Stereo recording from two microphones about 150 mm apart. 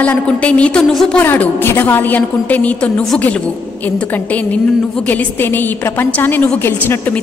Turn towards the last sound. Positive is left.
turn(degrees=15)  # may be behind; listen again after turning